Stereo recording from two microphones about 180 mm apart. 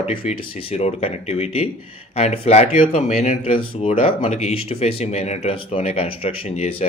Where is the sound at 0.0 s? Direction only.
35° left (ahead or behind).